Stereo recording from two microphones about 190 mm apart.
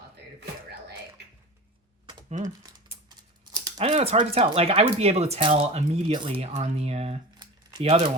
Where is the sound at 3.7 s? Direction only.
30° right (ahead or behind).